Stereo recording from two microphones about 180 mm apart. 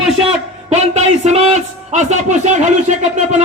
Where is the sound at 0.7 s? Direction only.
40° right (ahead or behind).